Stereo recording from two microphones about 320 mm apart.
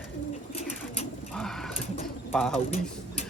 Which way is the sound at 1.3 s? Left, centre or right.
Centre.